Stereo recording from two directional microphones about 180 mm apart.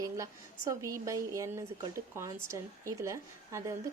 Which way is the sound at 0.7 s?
15° right (ahead or behind).